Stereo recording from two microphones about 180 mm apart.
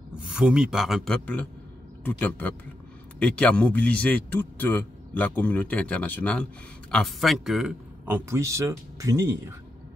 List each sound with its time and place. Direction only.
0.1 s a man's voice: 5° right (ahead or behind)